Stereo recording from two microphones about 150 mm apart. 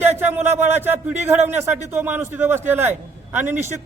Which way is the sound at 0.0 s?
15° right (ahead or behind).